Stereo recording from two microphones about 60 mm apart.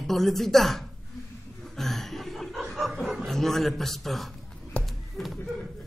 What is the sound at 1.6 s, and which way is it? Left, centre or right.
Chuckle, centre.